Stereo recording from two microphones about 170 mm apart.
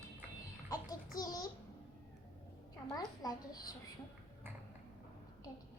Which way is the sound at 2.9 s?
20° left (ahead or behind).